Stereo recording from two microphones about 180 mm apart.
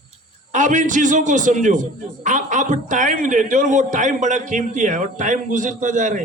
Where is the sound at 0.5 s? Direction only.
45° right (ahead or behind).